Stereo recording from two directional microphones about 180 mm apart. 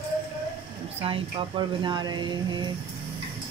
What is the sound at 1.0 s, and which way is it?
Speech, 30° right (ahead or behind).